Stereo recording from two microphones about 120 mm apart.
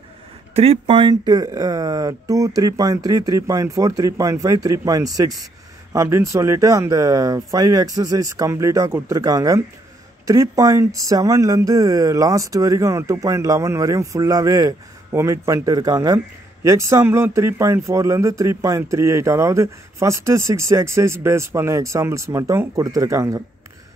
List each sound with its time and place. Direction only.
0.6 s speech: 55° right (ahead or behind); by 23.4 s 25° right (ahead or behind)